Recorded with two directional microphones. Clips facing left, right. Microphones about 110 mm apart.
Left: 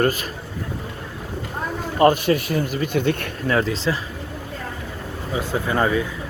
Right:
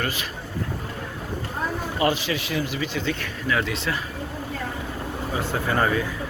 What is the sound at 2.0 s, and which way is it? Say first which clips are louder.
Speech: left 8 dB; 45° left (ahead or behind).